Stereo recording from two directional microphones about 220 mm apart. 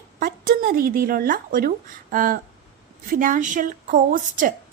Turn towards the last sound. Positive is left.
turn(degrees=-40)  # may be behind; listen again after turning